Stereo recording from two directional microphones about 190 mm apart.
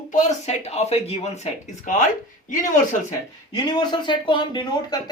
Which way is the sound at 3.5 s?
20° left (ahead or behind).